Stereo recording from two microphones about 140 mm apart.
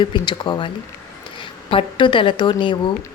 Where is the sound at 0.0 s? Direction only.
35° left (ahead or behind).